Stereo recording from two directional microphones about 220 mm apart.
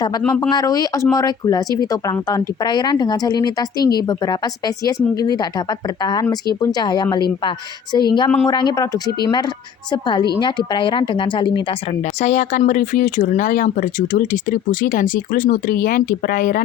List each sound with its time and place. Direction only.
0.2 s speech: 5° left (ahead or behind)
0.5 s speech: 15° left (ahead or behind)
12.2 s speech: 35° left (ahead or behind)